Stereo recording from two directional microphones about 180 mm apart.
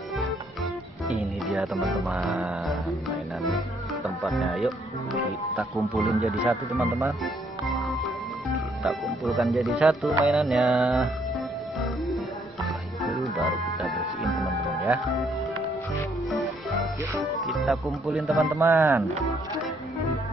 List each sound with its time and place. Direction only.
1.0 s music: centre (ahead or behind)
4.0 s speech: centre (ahead or behind)
8.8 s speech: centre (ahead or behind)
13.0 s music: centre (ahead or behind)
17.5 s speech: centre (ahead or behind)
18.6 s speech: 15° right (ahead or behind)